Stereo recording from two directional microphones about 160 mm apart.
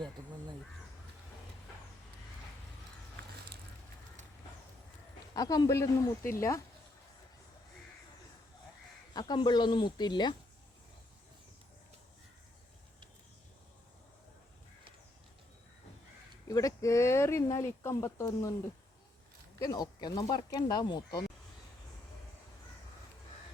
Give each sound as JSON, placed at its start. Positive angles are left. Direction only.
{"t": 5.3, "sound": "speech", "side_deg": 20}
{"t": 9.1, "sound": "speech", "side_deg": 25}
{"t": 16.5, "sound": "speech", "side_deg": 20}
{"t": 19.5, "sound": "speech", "side_deg": 25}